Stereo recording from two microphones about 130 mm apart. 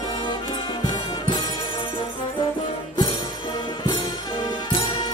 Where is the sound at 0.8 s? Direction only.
35° left (ahead or behind).